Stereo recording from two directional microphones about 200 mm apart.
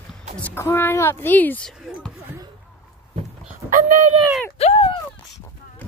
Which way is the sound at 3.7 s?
40° right (ahead or behind).